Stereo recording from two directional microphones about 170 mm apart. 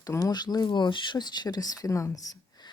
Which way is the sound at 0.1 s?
20° left (ahead or behind).